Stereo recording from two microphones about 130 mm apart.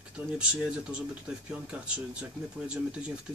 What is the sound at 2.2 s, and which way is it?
Speech, 5° right (ahead or behind).